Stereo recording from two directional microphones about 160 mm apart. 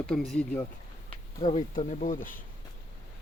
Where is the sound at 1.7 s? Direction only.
45° left (ahead or behind).